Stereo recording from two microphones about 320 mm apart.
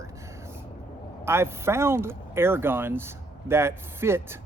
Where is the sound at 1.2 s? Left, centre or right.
Centre.